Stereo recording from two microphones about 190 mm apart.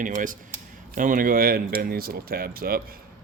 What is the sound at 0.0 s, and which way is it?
Speech, 45° right (ahead or behind).